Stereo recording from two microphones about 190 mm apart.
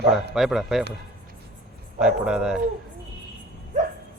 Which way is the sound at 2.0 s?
5° right (ahead or behind).